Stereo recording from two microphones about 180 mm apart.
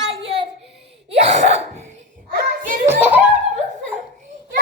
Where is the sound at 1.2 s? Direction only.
35° right (ahead or behind).